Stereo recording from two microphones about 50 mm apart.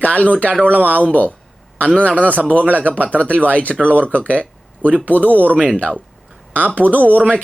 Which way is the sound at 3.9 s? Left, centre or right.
Right.